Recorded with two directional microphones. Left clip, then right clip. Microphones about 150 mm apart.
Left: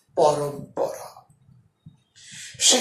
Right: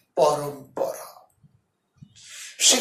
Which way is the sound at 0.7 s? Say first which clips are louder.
Even; 50° right (ahead or behind).